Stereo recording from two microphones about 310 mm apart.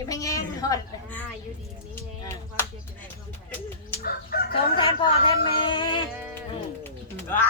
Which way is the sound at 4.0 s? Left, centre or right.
Left.